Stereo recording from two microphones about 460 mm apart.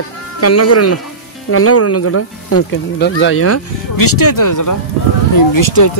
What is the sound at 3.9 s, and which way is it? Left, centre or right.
Speech, left.